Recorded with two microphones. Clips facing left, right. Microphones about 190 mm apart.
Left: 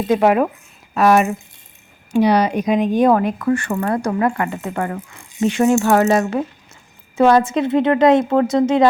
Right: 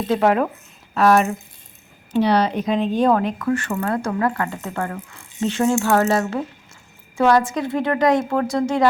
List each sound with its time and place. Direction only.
0.1 s a woman's voice: 15° left (ahead or behind)